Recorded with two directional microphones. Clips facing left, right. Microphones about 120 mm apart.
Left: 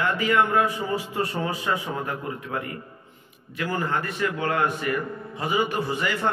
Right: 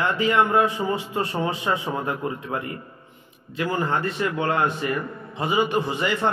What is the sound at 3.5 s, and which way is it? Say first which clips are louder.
A man's voice: right 2 dB; 25° right (ahead or behind).